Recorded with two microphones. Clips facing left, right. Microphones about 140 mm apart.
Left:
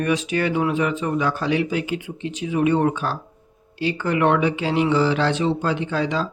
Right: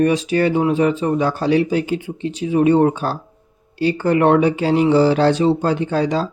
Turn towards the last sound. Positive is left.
turn(degrees=-40)  # may be behind; listen again after turning